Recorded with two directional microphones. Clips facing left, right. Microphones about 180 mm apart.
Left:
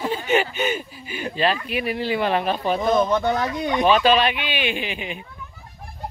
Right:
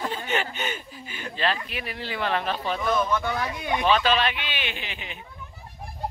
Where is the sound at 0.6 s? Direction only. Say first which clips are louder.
Left 8 dB; 10° left (ahead or behind).